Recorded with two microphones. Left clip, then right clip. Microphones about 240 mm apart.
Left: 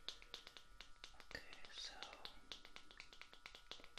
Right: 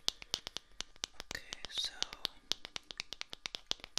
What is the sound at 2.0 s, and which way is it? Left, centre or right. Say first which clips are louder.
Finger snapping: right 14 dB; right.